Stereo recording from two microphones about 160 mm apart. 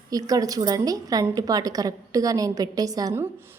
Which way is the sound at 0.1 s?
20° right (ahead or behind).